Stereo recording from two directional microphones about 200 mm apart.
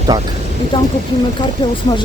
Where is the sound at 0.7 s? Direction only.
25° left (ahead or behind).